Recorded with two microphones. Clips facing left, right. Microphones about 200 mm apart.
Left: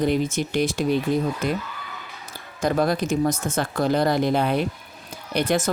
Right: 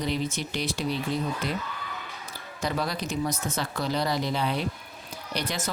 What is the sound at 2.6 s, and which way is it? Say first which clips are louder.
Speech: left 8 dB; 50° left (ahead or behind).